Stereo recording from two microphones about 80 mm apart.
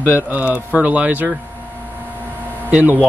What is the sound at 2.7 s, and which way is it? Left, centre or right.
Speech, centre.